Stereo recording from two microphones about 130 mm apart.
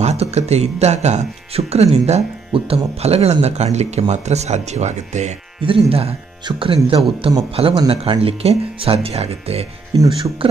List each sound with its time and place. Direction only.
0.0 s speech: 55° right (ahead or behind)
5.6 s speech: 45° right (ahead or behind)